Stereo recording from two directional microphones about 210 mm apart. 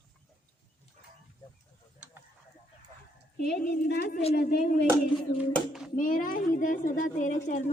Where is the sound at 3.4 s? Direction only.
45° left (ahead or behind).